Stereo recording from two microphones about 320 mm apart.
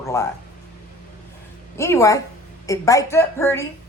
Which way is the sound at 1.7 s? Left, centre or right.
Centre.